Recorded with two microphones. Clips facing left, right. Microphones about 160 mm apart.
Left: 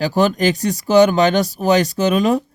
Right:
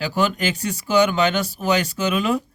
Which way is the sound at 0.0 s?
40° left (ahead or behind).